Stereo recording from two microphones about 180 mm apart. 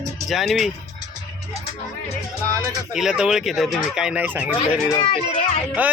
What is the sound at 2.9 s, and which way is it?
Speech, 5° right (ahead or behind).